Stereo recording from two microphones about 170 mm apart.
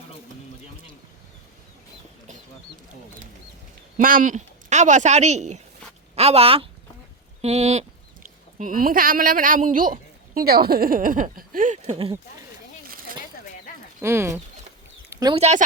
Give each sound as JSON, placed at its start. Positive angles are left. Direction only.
{"t": 3.9, "sound": "speech", "side_deg": -50}
{"t": 8.5, "sound": "a woman's voice", "side_deg": -50}
{"t": 11.8, "sound": "speech", "side_deg": -35}
{"t": 14.0, "sound": "speech", "side_deg": -15}
{"t": 15.1, "sound": "a sound", "side_deg": -25}
{"t": 15.4, "sound": "speech", "side_deg": -40}